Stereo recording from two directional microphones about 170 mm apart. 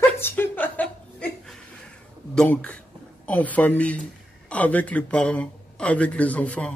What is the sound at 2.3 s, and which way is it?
Speech, 5° left (ahead or behind).